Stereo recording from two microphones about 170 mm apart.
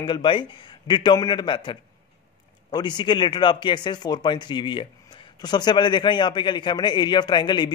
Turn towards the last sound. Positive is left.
turn(degrees=25)  # may be behind; listen again after turning